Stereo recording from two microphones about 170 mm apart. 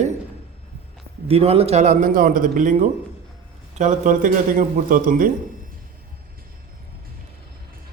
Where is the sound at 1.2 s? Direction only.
35° right (ahead or behind); by 5.3 s 55° right (ahead or behind).